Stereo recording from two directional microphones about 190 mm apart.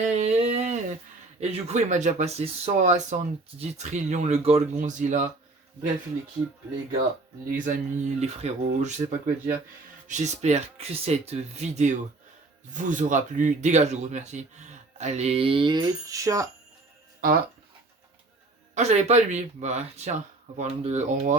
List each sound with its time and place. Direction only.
0.0 s a sound: 35° right (ahead or behind)
1.4 s speech: 35° right (ahead or behind)
7.5 s speech: 40° right (ahead or behind); by 16.5 s 15° right (ahead or behind)
17.2 s speech: 50° right (ahead or behind)
18.7 s speech: 35° right (ahead or behind)